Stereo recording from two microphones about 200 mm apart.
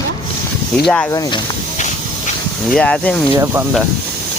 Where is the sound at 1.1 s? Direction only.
20° left (ahead or behind).